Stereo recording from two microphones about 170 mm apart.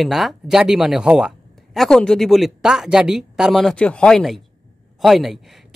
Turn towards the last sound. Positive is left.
turn(degrees=0)  # may be behind; listen again after turning